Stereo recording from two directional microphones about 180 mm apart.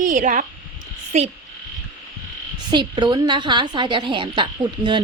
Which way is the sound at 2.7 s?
25° right (ahead or behind).